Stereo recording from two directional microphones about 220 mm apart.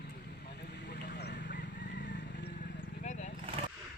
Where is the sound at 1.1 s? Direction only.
50° left (ahead or behind).